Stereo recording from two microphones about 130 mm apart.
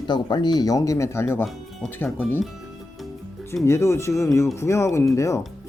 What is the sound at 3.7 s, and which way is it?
Speech, 20° left (ahead or behind).